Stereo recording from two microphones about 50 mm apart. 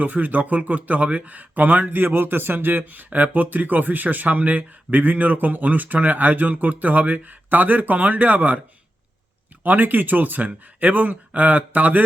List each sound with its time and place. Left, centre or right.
0.0 s speech: right
9.6 s speech: right